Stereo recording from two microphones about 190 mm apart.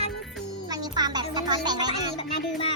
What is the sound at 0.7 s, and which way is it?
Music, 20° right (ahead or behind).